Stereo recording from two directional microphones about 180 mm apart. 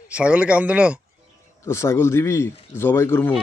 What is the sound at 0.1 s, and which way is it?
Speech, 5° right (ahead or behind).